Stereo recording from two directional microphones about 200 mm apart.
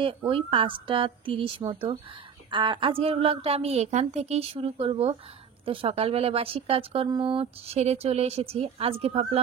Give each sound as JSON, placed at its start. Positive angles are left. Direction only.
{"t": 0.0, "sound": "speech", "side_deg": -25}